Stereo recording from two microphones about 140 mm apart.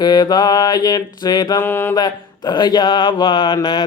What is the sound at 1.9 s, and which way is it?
Mantra, 30° left (ahead or behind).